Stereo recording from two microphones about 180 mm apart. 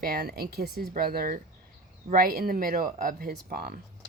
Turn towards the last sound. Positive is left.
turn(degrees=-50)  # may be behind; listen again after turning